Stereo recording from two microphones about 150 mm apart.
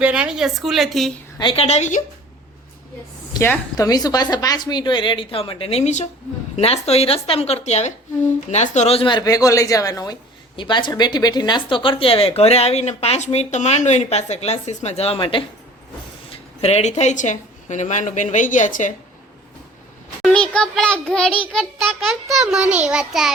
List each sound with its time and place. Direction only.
0.0 s a child's voice: 5° right (ahead or behind)
1.4 s speech: 40° left (ahead or behind)
3.3 s a woman's voice: 20° left (ahead or behind); by 18.9 s 55° left (ahead or behind)
20.2 s a child's voice: 5° left (ahead or behind)